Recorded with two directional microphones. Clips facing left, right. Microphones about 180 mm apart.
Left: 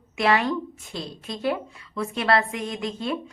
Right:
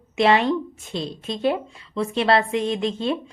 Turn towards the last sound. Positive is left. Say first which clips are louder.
# right 4 dB
turn(degrees=-25)  # may be behind; listen again after turning